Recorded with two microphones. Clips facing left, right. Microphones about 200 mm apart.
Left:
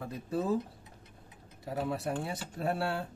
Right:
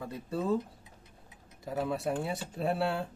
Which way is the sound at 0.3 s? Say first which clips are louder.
Even; 10° left (ahead or behind).